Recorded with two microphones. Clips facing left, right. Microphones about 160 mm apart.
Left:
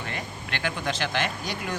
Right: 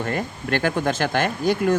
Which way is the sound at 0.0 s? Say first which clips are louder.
Right 9 dB; 50° right (ahead or behind).